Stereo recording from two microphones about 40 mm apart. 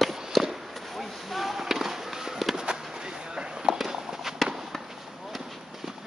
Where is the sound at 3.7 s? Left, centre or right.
Centre.